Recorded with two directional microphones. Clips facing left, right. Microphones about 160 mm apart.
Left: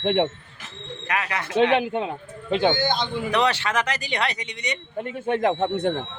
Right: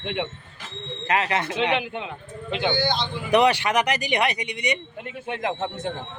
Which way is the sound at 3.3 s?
15° right (ahead or behind).